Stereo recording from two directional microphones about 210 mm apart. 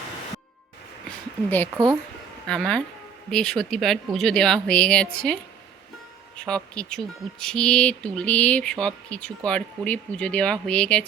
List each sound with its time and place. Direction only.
1.5 s speech: 10° left (ahead or behind)
1.7 s speech: 15° right (ahead or behind)
2.5 s speech: 5° left (ahead or behind)